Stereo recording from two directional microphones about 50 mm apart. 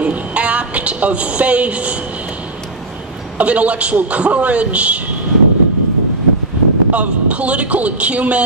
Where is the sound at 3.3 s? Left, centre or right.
Right.